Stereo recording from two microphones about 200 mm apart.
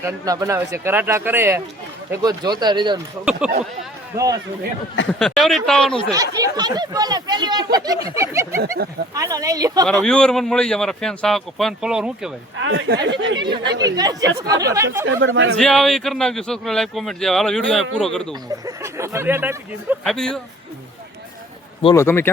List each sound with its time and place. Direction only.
0.0 s a man's voice: 15° right (ahead or behind)
3.4 s a man's voice: 5° right (ahead or behind)
5.2 s a man's voice: centre (ahead or behind)
6.1 s a man's voice: 20° right (ahead or behind)
9.8 s a man's voice: centre (ahead or behind)
12.5 s speech: 70° right (ahead or behind)
13.3 s speech: 25° right (ahead or behind)
13.7 s speech: 60° right (ahead or behind)
13.9 s a man's voice: 20° right (ahead or behind)
15.0 s speech: 70° right (ahead or behind)
15.5 s a man's voice: 5° left (ahead or behind)
18.6 s a man's voice: 15° right (ahead or behind)
20.1 s a man's voice: 5° left (ahead or behind)
21.9 s speech: 10° left (ahead or behind)